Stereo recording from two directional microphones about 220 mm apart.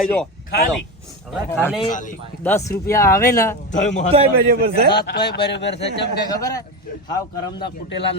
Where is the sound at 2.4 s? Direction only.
10° left (ahead or behind).